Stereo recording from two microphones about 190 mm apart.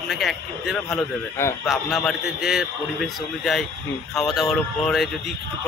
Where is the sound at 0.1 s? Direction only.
Centre (ahead or behind).